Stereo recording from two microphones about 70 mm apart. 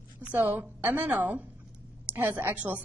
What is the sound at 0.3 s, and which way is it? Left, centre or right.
A woman's voice, right.